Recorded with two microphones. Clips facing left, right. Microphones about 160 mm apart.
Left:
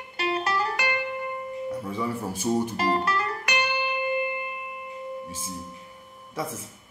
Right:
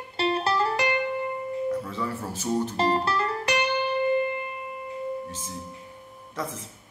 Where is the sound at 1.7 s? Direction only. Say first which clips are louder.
Left 3 dB; 10° left (ahead or behind).